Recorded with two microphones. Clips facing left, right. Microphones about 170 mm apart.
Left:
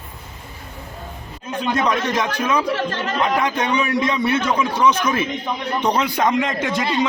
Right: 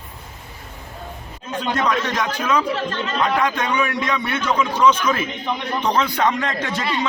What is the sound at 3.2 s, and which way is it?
A man's voice, 20° left (ahead or behind).